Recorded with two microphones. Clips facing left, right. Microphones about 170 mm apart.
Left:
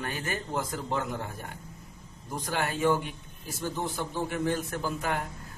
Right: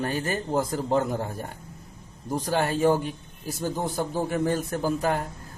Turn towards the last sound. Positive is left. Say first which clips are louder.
# right 6 dB
turn(degrees=-40)  # may be behind; listen again after turning